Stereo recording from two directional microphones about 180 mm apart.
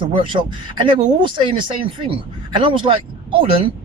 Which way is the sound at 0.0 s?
25° right (ahead or behind).